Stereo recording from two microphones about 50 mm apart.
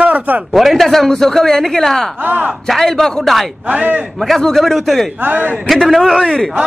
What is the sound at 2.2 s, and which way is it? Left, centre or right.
Speech, right.